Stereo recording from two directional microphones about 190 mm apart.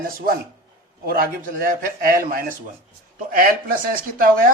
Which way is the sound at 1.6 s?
45° right (ahead or behind).